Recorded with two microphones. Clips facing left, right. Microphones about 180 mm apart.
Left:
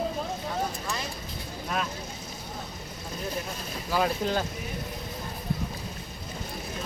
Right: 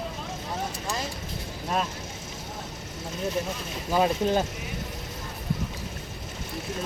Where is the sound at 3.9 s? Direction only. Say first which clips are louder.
Right 3 dB; 25° right (ahead or behind).